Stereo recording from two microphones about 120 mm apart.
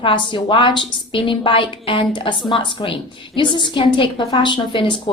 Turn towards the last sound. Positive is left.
turn(degrees=45)  # may be behind; listen again after turning